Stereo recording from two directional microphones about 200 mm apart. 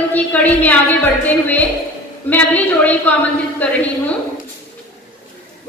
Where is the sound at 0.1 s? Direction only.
10° left (ahead or behind).